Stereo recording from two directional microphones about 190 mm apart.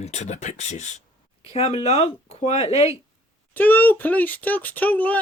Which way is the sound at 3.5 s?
10° left (ahead or behind).